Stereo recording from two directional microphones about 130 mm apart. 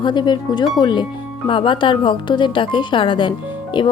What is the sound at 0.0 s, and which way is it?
Speech, 35° left (ahead or behind).